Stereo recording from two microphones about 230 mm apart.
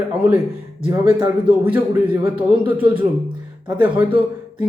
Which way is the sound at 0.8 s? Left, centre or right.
Centre.